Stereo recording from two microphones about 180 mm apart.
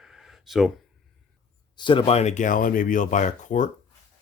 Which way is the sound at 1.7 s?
25° left (ahead or behind).